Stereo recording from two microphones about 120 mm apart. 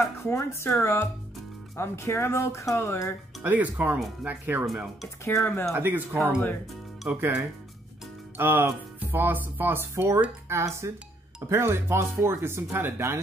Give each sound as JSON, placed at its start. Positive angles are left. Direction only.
{"t": 0.2, "sound": "speech", "side_deg": 20}
{"t": 3.4, "sound": "speech", "side_deg": -15}
{"t": 5.2, "sound": "speech", "side_deg": 20}
{"t": 5.8, "sound": "speech", "side_deg": -15}
{"t": 7.1, "sound": "speech", "side_deg": -15}